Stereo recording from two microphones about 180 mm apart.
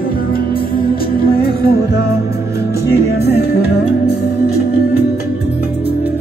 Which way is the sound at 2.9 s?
65° left (ahead or behind).